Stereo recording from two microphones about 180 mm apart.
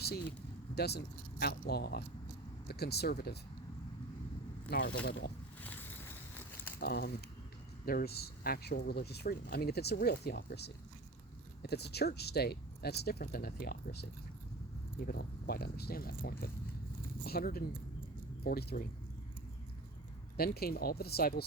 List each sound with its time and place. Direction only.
0.0 s speech: 65° left (ahead or behind)
4.7 s speech: 60° left (ahead or behind)
5.6 s a sound: 10° left (ahead or behind)
6.7 s speech: 60° left (ahead or behind)
20.3 s speech: 60° left (ahead or behind)